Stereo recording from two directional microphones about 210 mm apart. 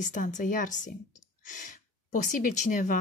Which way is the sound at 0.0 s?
35° left (ahead or behind).